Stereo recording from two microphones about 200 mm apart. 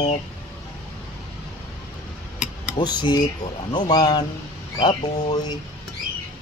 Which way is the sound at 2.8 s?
20° left (ahead or behind).